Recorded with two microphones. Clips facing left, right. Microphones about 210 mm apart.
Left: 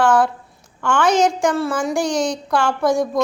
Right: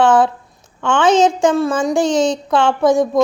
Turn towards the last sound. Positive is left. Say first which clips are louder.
# right 4 dB
turn(degrees=-20)  # may be behind; listen again after turning